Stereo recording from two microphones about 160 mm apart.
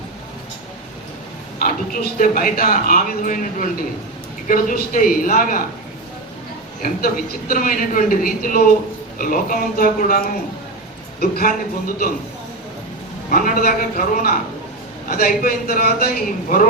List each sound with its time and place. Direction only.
1.5 s speech: 65° left (ahead or behind)
6.8 s speech: 65° left (ahead or behind)
13.3 s a man's voice: 60° left (ahead or behind)